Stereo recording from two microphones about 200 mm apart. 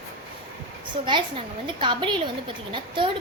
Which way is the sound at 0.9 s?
25° right (ahead or behind).